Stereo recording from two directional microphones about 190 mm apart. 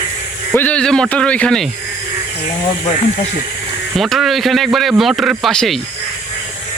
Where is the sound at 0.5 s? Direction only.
10° left (ahead or behind).